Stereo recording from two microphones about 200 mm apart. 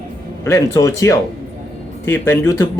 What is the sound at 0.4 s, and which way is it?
Speech, 15° left (ahead or behind).